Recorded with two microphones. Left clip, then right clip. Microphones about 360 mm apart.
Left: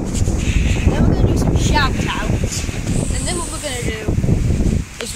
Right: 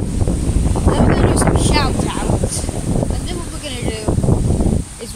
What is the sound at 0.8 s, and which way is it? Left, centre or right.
Wind noise, right.